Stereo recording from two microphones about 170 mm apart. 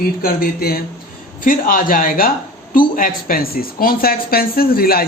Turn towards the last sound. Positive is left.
turn(degrees=60)  # may be behind; listen again after turning